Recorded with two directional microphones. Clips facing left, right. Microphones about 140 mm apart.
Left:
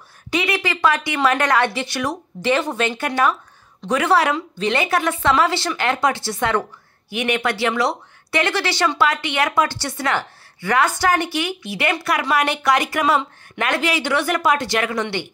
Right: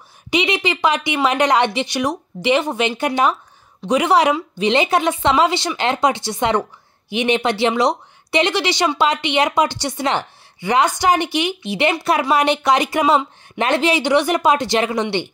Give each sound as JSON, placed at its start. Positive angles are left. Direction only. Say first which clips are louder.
{"t": 0.3, "sound": "speech", "louder": "right 3 dB", "side_deg": -20}